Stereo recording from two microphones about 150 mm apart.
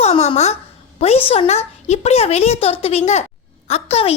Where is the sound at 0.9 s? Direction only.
45° left (ahead or behind).